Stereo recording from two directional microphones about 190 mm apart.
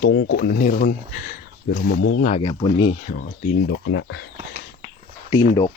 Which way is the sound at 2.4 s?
25° left (ahead or behind).